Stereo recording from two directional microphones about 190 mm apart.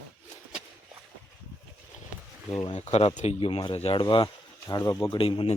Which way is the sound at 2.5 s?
35° left (ahead or behind).